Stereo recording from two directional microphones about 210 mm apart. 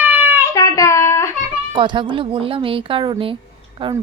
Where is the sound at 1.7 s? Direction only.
25° right (ahead or behind).